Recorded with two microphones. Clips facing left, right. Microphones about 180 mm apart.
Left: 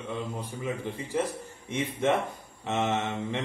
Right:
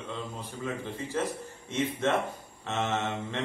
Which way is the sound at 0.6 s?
15° left (ahead or behind).